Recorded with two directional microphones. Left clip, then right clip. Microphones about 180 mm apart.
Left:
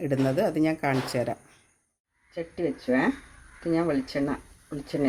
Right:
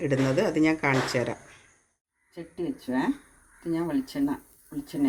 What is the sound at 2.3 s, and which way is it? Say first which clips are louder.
Speech: left 4 dB; 30° left (ahead or behind).